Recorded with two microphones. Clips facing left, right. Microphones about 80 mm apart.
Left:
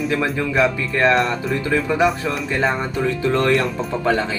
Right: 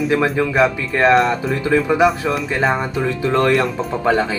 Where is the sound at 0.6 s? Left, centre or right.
Right.